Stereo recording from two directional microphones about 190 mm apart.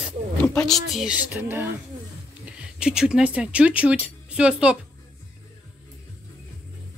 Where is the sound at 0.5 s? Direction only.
Centre (ahead or behind).